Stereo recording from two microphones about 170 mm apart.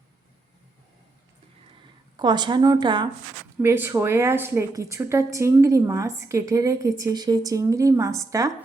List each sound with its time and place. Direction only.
2.1 s a woman's voice: 25° right (ahead or behind)
3.6 s speech: 15° right (ahead or behind)